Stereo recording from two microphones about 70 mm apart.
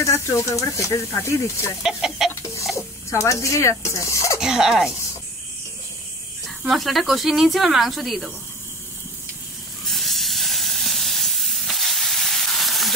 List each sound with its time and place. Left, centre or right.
0.0 s speech: left
1.8 s speech: centre
2.7 s speech: left
4.4 s speech: centre
6.6 s speech: centre
9.8 s steam: centre